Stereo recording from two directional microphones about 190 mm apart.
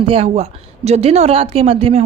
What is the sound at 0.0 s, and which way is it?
A woman's voice, 30° right (ahead or behind).